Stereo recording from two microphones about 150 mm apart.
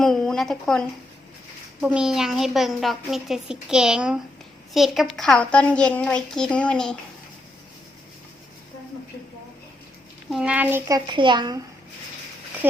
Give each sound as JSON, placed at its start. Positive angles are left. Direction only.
{"t": 0.0, "sound": "a woman's voice", "side_deg": 0}
{"t": 10.2, "sound": "speech", "side_deg": -5}
{"t": 11.0, "sound": "a woman's voice", "side_deg": -30}